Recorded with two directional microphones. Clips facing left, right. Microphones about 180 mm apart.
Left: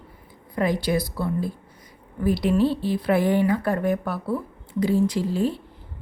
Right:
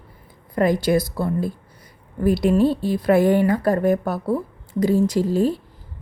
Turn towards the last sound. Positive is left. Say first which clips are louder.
# right 4 dB
turn(degrees=-40)  # may be behind; listen again after turning